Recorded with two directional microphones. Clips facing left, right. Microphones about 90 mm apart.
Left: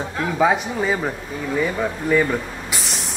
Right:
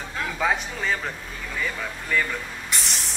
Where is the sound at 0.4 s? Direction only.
20° left (ahead or behind).